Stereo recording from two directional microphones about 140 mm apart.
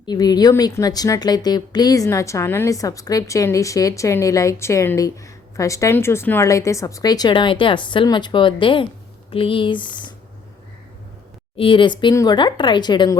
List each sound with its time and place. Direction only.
0.0 s a woman's voice: 30° left (ahead or behind)
11.5 s speech: 40° left (ahead or behind)